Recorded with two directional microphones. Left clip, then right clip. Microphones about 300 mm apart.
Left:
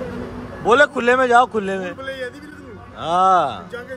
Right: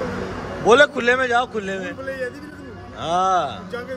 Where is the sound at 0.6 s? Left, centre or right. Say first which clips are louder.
Even; centre.